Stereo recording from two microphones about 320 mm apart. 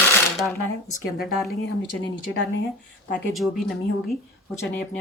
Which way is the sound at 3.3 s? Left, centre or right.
Centre.